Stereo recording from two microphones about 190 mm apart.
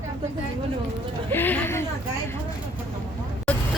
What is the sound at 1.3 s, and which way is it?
Speech, 10° left (ahead or behind).